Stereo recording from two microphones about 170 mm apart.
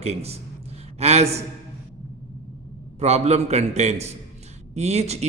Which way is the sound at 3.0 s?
40° right (ahead or behind).